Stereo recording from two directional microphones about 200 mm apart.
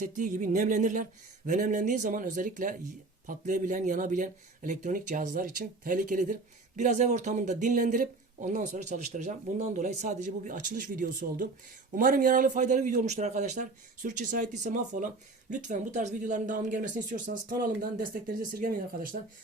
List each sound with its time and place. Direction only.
0.0 s a man's voice: 40° right (ahead or behind)